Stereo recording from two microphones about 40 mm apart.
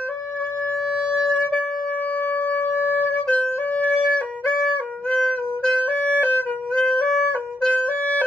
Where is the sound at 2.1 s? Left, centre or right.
Left.